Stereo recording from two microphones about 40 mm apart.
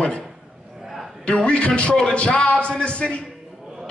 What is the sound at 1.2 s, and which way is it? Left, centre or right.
A man's voice, left.